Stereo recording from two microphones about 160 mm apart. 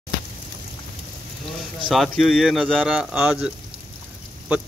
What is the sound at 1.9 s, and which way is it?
Speech, centre (ahead or behind).